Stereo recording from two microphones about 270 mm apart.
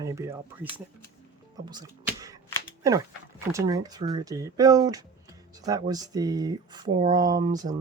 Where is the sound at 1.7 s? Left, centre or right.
Centre.